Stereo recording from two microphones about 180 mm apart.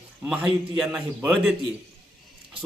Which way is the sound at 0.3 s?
5° right (ahead or behind).